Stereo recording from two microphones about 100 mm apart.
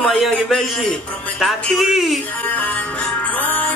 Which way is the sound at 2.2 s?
15° left (ahead or behind).